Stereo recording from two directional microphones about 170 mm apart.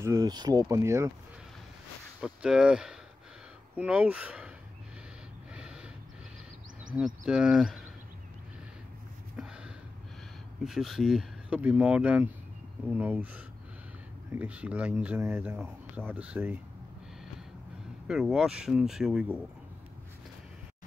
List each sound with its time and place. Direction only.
0.0 s speech: 20° right (ahead or behind)
2.2 s speech: 5° right (ahead or behind)
7.2 s speech: 5° right (ahead or behind)
9.4 s snort: 5° right (ahead or behind)
10.6 s speech: centre (ahead or behind)
18.0 s speech: 5° right (ahead or behind)